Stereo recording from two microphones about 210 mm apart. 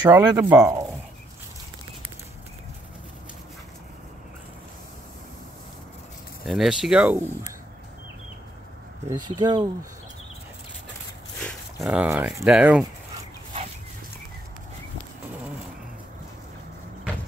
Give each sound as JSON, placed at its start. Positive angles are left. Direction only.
{"t": 0.0, "sound": "speech", "side_deg": -15}
{"t": 6.4, "sound": "speech", "side_deg": 0}
{"t": 9.1, "sound": "speech", "side_deg": -20}
{"t": 11.4, "sound": "speech", "side_deg": -5}